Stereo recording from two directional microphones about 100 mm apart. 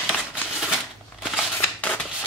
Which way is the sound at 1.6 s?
15° left (ahead or behind).